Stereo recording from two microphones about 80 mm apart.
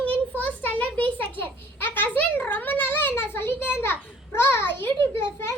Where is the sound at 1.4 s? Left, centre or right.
Left.